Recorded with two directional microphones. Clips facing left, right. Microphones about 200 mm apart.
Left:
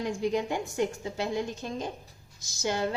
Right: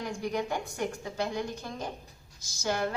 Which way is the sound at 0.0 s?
20° left (ahead or behind).